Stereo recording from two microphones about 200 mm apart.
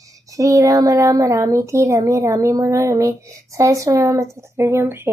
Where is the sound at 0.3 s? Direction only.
15° right (ahead or behind).